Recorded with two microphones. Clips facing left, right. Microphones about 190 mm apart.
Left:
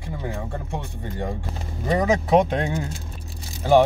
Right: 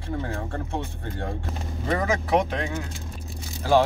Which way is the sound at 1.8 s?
15° left (ahead or behind).